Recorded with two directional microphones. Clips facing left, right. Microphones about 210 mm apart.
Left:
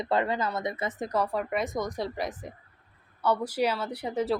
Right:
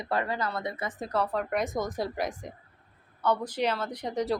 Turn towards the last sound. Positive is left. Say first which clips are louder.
# left 1 dB
turn(degrees=5)  # may be behind; listen again after turning